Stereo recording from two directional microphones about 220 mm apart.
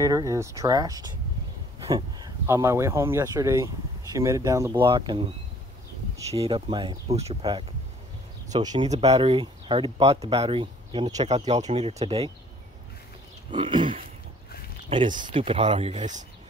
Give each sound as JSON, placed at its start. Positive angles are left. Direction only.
{"t": 0.0, "sound": "speech", "side_deg": -15}
{"t": 6.3, "sound": "speech", "side_deg": -25}
{"t": 13.5, "sound": "speech", "side_deg": -20}